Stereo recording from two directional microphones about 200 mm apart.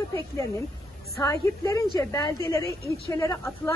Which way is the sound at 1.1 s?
15° left (ahead or behind).